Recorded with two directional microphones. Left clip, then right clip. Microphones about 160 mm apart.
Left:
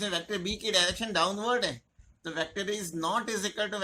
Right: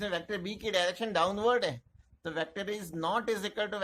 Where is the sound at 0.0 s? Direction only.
40° right (ahead or behind).